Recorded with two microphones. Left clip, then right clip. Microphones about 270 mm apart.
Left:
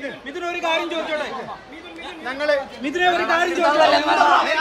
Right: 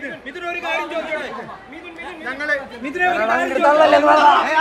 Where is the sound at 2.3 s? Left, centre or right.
Centre.